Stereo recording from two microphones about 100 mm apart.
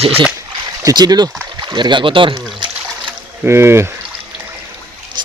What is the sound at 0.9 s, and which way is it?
Speech, 40° right (ahead or behind).